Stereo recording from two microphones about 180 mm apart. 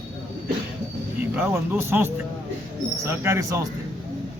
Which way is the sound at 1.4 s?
10° right (ahead or behind).